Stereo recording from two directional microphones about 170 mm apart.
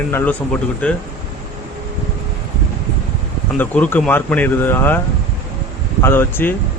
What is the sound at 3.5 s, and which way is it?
Speech, 10° left (ahead or behind).